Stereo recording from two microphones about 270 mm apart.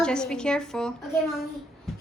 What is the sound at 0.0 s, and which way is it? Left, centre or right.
Speech, centre.